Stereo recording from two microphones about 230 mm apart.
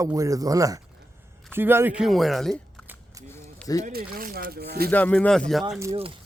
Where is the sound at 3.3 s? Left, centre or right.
Centre.